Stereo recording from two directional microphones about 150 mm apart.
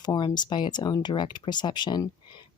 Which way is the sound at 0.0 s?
25° left (ahead or behind).